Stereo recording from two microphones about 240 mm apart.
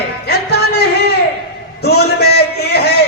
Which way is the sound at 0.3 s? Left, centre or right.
Left.